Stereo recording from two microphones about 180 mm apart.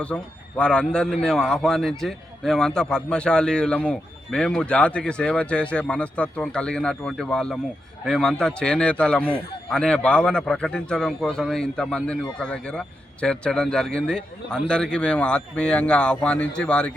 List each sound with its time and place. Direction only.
0.0 s a man's voice: 5° left (ahead or behind)